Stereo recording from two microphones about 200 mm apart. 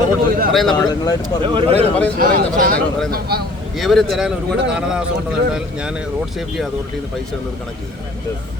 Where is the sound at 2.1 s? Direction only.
45° right (ahead or behind).